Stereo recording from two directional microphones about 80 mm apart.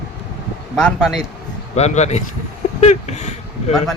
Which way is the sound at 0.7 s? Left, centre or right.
Centre.